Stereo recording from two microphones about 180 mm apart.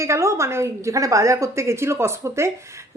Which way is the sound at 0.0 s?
15° right (ahead or behind).